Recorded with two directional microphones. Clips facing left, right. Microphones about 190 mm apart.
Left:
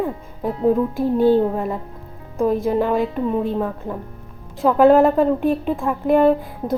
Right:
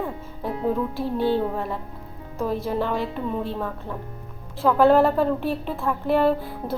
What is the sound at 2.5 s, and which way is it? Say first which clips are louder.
Speech: left 6 dB; 50° left (ahead or behind).